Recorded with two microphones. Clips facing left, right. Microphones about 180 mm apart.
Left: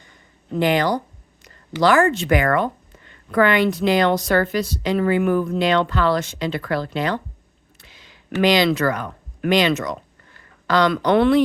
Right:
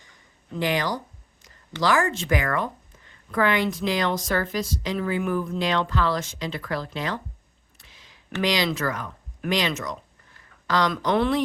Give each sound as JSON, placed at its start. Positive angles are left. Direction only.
{"t": 0.5, "sound": "a woman's voice", "side_deg": 60}
{"t": 7.8, "sound": "a sound", "side_deg": 75}
{"t": 8.4, "sound": "a woman's voice", "side_deg": 65}